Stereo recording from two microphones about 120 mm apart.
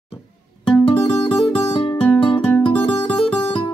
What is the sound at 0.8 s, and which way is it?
Music, 50° left (ahead or behind).